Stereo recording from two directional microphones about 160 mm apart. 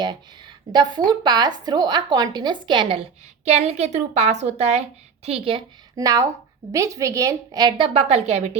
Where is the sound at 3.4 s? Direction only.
40° right (ahead or behind).